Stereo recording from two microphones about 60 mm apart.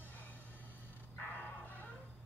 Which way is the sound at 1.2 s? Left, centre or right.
Left.